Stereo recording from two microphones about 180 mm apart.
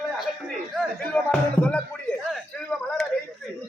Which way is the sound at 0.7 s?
5° left (ahead or behind).